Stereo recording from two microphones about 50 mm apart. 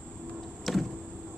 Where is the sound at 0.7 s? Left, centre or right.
Centre.